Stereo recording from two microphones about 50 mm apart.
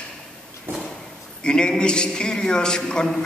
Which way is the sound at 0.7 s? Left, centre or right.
Right.